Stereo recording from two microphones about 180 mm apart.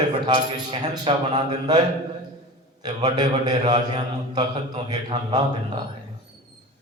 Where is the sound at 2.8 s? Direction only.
25° right (ahead or behind).